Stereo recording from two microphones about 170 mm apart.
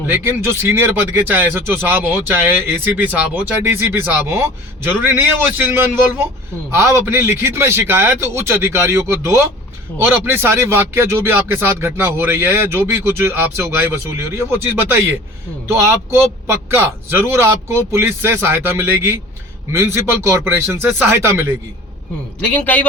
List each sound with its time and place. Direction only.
0.1 s speech: 15° right (ahead or behind)
22.4 s a man's voice: 10° left (ahead or behind)